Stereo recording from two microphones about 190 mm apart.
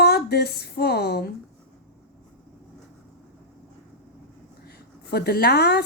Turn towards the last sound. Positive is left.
turn(degrees=60)  # may be behind; listen again after turning